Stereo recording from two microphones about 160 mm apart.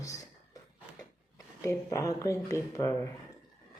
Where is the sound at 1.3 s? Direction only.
20° left (ahead or behind).